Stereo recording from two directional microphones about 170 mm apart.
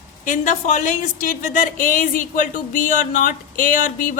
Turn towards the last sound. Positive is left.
turn(degrees=55)  # may be behind; listen again after turning